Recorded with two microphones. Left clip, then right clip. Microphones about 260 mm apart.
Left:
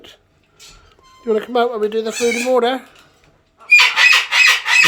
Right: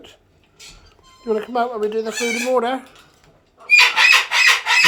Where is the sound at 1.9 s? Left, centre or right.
Left.